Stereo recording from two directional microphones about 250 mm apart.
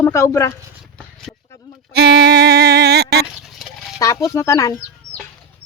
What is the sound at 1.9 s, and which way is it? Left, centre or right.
Music, right.